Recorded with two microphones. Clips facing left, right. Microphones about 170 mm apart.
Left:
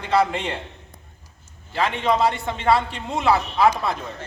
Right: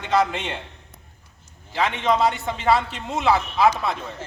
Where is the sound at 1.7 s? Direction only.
Centre (ahead or behind).